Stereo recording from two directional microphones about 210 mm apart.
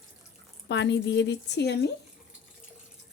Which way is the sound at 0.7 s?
55° left (ahead or behind).